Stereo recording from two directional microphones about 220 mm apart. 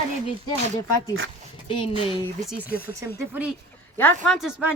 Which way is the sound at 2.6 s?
40° left (ahead or behind).